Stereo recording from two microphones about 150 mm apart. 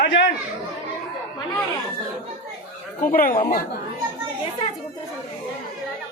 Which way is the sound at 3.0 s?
70° left (ahead or behind).